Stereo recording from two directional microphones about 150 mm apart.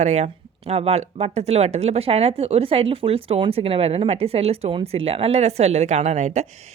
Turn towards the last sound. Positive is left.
turn(degrees=-50)  # may be behind; listen again after turning